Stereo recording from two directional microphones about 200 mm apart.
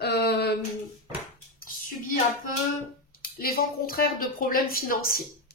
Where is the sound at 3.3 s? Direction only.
50° left (ahead or behind).